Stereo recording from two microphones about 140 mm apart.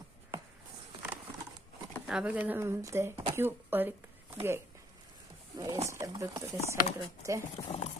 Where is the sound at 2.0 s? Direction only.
5° right (ahead or behind).